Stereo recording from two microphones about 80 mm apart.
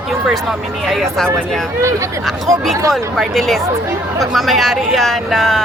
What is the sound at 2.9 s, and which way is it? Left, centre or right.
Speech, centre.